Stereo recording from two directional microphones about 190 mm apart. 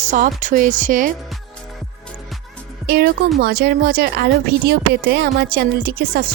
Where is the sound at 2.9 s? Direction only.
55° right (ahead or behind).